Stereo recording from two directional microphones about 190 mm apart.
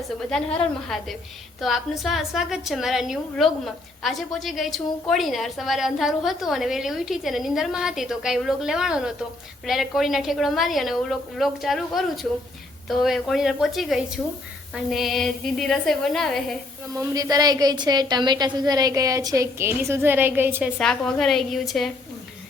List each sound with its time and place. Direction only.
0.3 s a woman's voice: 5° left (ahead or behind)
16.9 s a woman's voice: 20° right (ahead or behind)
20.7 s a woman's voice: 5° left (ahead or behind)